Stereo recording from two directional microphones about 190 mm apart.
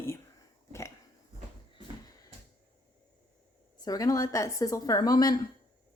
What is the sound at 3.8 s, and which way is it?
A woman's voice, 20° left (ahead or behind).